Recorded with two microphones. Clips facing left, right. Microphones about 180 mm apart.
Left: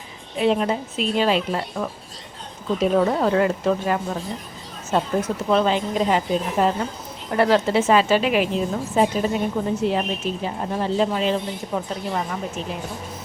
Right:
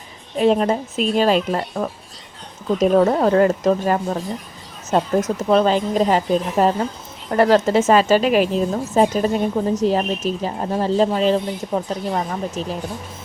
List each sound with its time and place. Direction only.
0.3 s a woman's voice: 40° right (ahead or behind)